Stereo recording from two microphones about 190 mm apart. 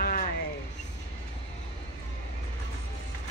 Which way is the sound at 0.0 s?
50° left (ahead or behind).